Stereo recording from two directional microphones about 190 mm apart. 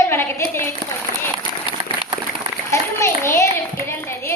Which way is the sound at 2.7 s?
15° left (ahead or behind).